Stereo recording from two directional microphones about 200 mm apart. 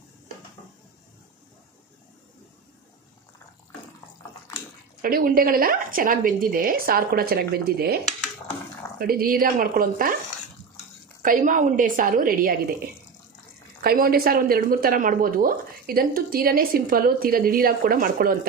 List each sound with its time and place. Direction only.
5.0 s a woman's voice: 45° right (ahead or behind)
11.2 s a woman's voice: 40° right (ahead or behind)